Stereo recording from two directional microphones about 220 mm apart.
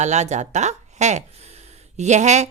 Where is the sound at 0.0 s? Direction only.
30° right (ahead or behind).